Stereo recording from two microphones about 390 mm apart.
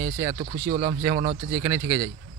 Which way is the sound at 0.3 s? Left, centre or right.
Right.